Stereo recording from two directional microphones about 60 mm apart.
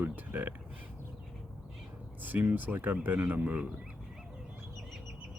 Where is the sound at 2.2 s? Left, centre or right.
Right.